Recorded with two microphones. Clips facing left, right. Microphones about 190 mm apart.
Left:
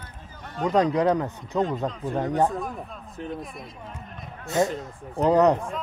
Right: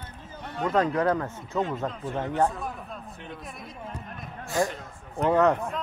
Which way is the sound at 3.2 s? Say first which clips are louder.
Left 8 dB; 40° left (ahead or behind).